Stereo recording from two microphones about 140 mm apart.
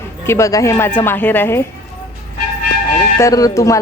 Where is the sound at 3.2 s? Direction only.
25° left (ahead or behind).